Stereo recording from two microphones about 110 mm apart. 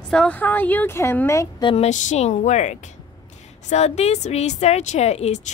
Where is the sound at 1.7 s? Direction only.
90° left.